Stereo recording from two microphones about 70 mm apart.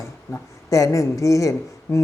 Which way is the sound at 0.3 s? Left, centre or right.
Left.